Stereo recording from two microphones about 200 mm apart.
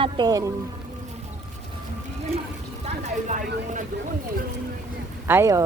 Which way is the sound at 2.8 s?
35° right (ahead or behind).